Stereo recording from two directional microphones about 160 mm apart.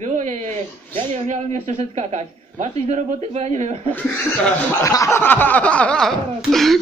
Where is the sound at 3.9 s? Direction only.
10° left (ahead or behind).